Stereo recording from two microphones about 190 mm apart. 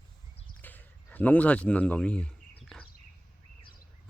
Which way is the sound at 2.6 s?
Centre (ahead or behind).